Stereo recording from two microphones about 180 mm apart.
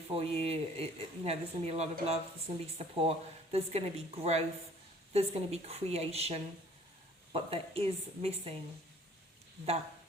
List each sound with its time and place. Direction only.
0.1 s speech: 35° right (ahead or behind)